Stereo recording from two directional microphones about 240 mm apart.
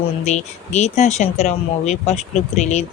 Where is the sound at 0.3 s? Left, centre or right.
Left.